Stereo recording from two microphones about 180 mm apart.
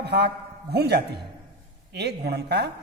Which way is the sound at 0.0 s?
65° right (ahead or behind).